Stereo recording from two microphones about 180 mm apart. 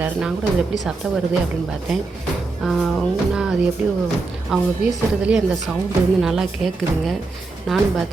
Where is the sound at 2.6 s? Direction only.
Centre (ahead or behind).